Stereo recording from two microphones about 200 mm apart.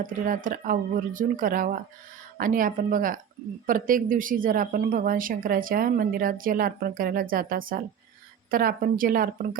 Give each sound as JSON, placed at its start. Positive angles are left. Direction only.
{"t": 0.0, "sound": "speech", "side_deg": -45}